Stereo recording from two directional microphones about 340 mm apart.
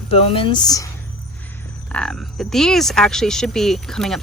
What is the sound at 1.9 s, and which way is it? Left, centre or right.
Speech, centre.